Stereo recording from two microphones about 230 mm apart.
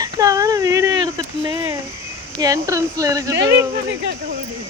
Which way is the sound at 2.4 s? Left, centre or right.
Centre.